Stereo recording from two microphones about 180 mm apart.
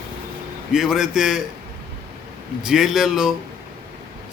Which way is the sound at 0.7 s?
5° right (ahead or behind).